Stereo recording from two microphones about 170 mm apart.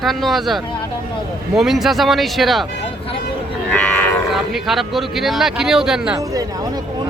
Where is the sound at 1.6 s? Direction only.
Centre (ahead or behind).